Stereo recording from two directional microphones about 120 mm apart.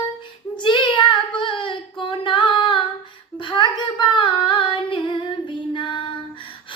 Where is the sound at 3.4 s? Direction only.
40° left (ahead or behind).